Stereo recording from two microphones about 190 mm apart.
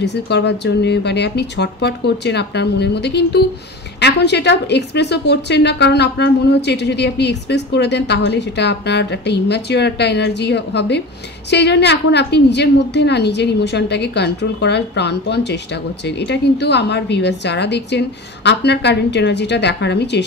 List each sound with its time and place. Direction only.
0.0 s a woman's voice: 65° left (ahead or behind)